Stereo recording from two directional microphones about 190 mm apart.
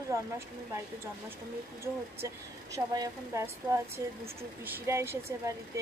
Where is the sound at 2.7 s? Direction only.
20° right (ahead or behind).